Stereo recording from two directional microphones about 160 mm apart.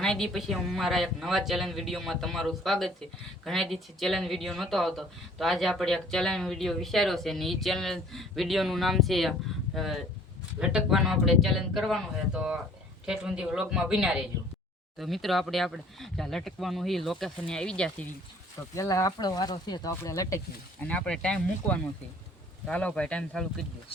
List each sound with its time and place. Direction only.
0.0 s speech: 5° left (ahead or behind)
18.7 s speech: 20° left (ahead or behind)
20.8 s speech: 10° left (ahead or behind)